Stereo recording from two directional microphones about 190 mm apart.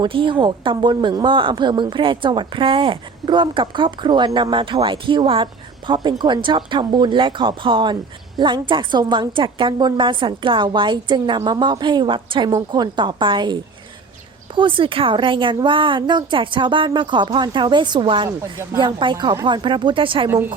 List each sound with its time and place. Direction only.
0.0 s a woman's voice: 25° right (ahead or behind)